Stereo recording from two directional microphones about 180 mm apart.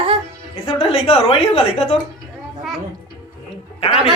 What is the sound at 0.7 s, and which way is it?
A woman's voice, 30° left (ahead or behind).